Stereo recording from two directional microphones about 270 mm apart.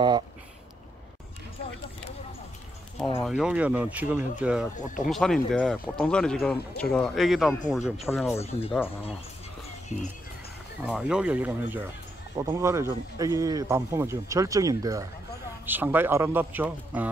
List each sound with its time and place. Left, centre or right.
3.3 s speech: centre
8.4 s speech: left
10.8 s speech: centre